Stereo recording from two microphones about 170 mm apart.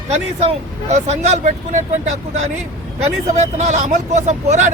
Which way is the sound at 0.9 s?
40° right (ahead or behind).